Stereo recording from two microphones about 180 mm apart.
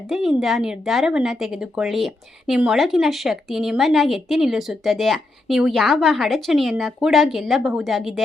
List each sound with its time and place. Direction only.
0.1 s a woman's voice: centre (ahead or behind)